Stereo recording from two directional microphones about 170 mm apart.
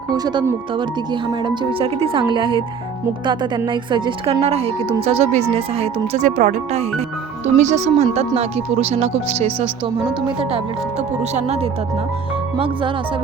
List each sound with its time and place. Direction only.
0.1 s speech: 25° right (ahead or behind)
3.7 s speech: 30° right (ahead or behind)
6.1 s speech: 50° right (ahead or behind); by 12.9 s 30° right (ahead or behind)